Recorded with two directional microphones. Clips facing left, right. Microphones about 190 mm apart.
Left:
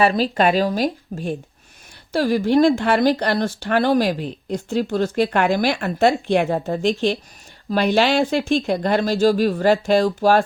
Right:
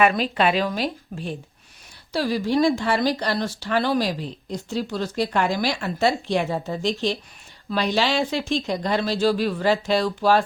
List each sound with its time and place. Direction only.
0.0 s speech: 35° left (ahead or behind)